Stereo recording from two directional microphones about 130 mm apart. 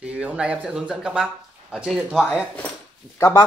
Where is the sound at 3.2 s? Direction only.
25° left (ahead or behind).